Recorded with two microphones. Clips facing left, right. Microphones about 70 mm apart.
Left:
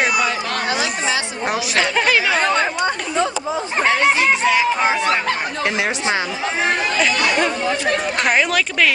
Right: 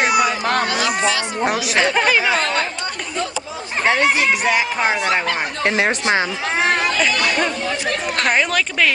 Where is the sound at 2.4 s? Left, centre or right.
Centre.